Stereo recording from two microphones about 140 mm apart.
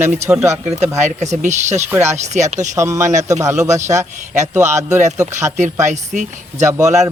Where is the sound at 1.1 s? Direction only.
60° right (ahead or behind).